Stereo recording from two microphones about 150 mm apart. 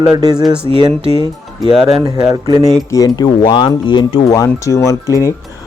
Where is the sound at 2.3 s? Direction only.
25° right (ahead or behind).